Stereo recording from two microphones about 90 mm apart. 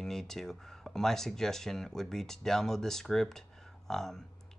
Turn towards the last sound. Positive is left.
turn(degrees=5)  # may be behind; listen again after turning